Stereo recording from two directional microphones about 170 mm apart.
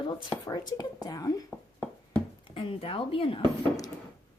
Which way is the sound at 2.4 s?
30° left (ahead or behind).